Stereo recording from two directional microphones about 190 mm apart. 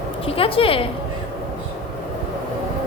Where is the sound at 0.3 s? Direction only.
30° left (ahead or behind).